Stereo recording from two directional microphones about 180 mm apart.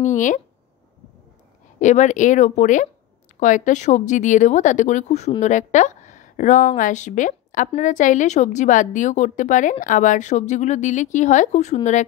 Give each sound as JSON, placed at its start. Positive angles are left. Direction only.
{"t": 0.0, "sound": "a woman's voice", "side_deg": 45}
{"t": 1.8, "sound": "a woman's voice", "side_deg": 40}